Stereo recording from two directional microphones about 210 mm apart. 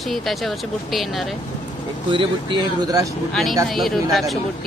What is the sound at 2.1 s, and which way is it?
Speech, 20° right (ahead or behind).